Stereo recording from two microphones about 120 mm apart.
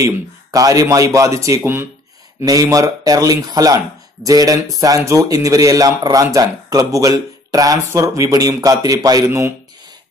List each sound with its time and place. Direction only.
0.0 s a man's voice: 30° right (ahead or behind)